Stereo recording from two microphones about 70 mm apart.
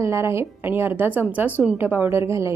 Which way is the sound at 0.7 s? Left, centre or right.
Right.